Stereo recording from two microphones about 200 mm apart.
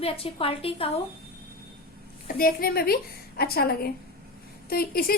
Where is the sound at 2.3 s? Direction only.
45° left (ahead or behind).